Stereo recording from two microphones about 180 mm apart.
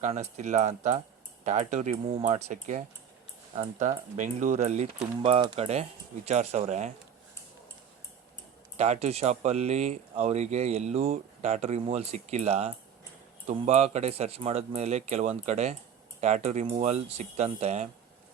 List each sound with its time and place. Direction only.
0.0 s speech: 40° right (ahead or behind)
8.8 s speech: 35° right (ahead or behind)